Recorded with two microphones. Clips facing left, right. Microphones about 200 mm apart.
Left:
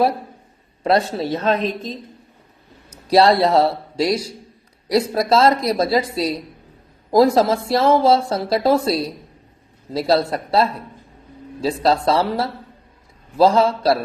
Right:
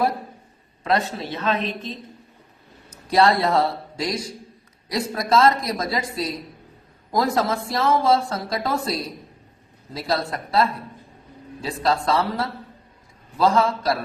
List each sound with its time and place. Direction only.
0.9 s speech: 35° left (ahead or behind)
3.1 s speech: 35° left (ahead or behind)